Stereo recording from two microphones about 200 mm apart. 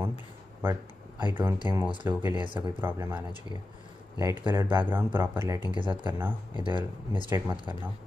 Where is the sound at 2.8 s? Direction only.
10° right (ahead or behind).